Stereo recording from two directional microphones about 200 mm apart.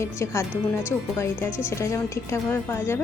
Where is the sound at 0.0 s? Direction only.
15° left (ahead or behind).